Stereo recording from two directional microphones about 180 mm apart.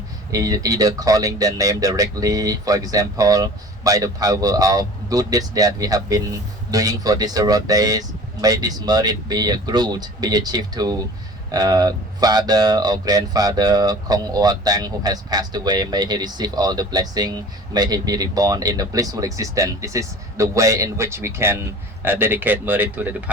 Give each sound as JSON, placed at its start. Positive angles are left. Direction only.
{"t": 0.3, "sound": "speech", "side_deg": -20}